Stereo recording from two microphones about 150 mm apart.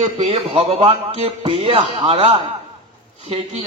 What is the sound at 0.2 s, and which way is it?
A man's voice, 40° right (ahead or behind).